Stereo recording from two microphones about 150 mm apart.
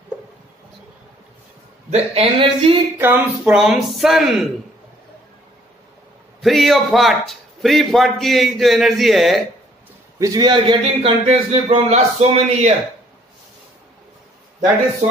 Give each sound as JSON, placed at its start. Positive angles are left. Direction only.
{"t": 1.9, "sound": "speech", "side_deg": -45}
{"t": 3.0, "sound": "a sound", "side_deg": -15}
{"t": 3.5, "sound": "a man's voice", "side_deg": 0}
{"t": 6.4, "sound": "a man's voice", "side_deg": 0}
{"t": 10.1, "sound": "speech", "side_deg": -25}
{"t": 10.8, "sound": "speech", "side_deg": -40}